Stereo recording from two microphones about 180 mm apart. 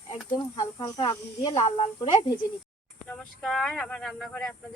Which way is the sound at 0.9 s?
20° left (ahead or behind).